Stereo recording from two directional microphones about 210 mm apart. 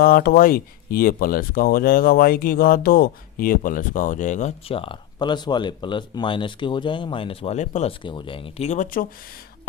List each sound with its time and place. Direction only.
0.0 s speech: 45° left (ahead or behind)